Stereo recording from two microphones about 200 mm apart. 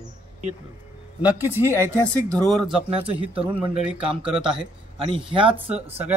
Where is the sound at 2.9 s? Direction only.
30° right (ahead or behind).